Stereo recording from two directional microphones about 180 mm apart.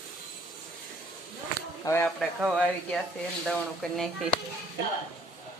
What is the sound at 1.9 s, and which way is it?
Speech, 20° left (ahead or behind).